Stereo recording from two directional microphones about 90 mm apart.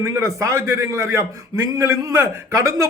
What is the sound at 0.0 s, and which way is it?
A man's voice, 30° right (ahead or behind).